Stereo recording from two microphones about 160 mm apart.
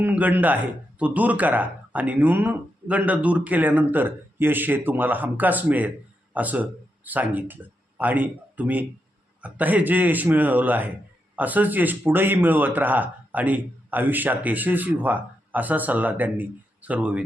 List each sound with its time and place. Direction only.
0.0 s speech: 10° right (ahead or behind)